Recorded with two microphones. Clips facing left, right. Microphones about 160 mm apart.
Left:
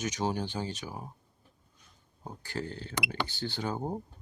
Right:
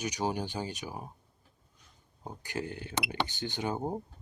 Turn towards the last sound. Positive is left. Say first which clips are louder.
# right 1 dB
turn(degrees=-20)  # may be behind; listen again after turning